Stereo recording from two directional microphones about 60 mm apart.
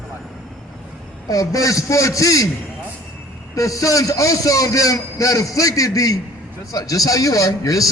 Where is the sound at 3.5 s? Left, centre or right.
Left.